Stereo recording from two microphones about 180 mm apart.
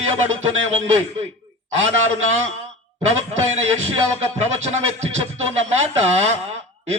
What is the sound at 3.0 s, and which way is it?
Music, 35° right (ahead or behind).